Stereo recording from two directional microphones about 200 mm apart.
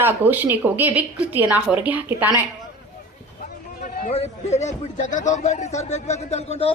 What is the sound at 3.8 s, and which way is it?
A man's voice, 35° left (ahead or behind).